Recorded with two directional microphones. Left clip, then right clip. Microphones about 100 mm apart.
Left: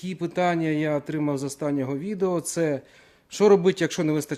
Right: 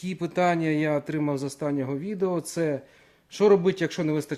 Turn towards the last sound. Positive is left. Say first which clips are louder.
# left 2 dB
turn(degrees=40)  # may be behind; listen again after turning